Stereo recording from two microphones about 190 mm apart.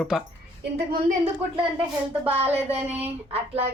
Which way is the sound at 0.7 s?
55° right (ahead or behind).